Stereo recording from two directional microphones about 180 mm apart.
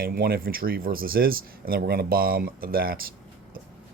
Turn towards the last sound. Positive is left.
turn(degrees=-55)  # may be behind; listen again after turning